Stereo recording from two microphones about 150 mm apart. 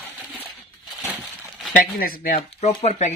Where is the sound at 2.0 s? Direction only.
70° left (ahead or behind).